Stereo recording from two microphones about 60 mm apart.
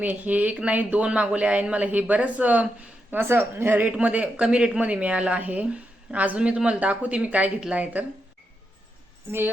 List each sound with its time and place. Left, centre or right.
0.0 s speech: right